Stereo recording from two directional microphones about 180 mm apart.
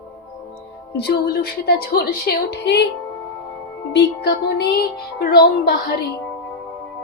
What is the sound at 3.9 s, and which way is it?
A woman's voice, 65° left (ahead or behind).